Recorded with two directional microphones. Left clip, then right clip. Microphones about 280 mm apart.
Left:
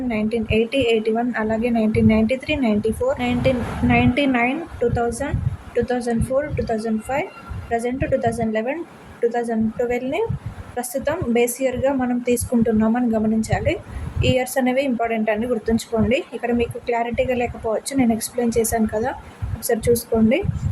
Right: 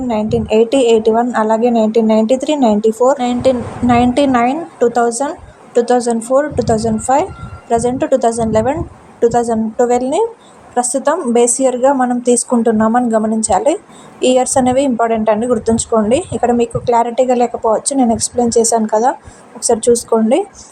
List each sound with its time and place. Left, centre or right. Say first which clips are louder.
0.1 s a woman's voice: right 8 dB; centre